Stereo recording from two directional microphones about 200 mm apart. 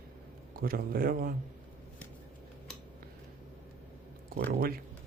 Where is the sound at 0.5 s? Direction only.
45° right (ahead or behind).